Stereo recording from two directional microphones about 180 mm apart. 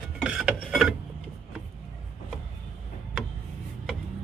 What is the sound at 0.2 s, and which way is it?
Filing, 5° right (ahead or behind).